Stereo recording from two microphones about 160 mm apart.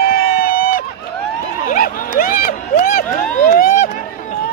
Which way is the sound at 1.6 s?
60° left (ahead or behind).